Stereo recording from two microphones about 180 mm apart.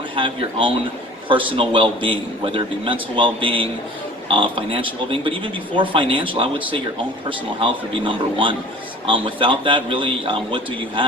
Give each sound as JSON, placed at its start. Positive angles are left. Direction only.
{"t": 1.3, "sound": "speech", "side_deg": -30}